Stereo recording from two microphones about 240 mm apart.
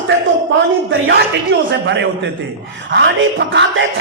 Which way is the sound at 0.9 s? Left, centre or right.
Right.